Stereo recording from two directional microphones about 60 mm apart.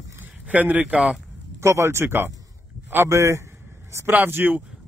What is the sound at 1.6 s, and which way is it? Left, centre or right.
Speech, right.